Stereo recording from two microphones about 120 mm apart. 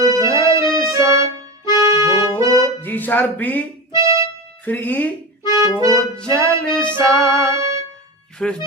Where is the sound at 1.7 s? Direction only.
25° right (ahead or behind).